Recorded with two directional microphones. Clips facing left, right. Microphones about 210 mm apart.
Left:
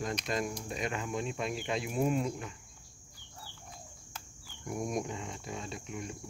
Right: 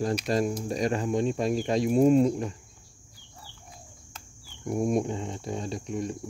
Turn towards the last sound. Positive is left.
turn(degrees=-35)  # may be behind; listen again after turning